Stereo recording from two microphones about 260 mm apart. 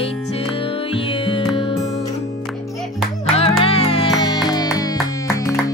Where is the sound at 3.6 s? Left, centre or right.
Left.